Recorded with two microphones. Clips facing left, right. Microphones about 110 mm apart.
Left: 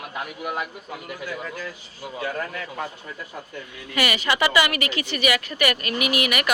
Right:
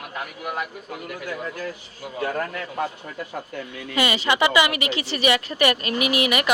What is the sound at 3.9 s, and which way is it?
A woman's voice, 25° right (ahead or behind).